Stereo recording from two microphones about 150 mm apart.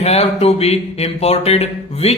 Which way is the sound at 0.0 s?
45° left (ahead or behind).